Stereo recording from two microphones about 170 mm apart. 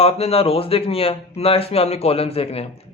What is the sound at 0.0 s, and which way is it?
A man's voice, 35° left (ahead or behind).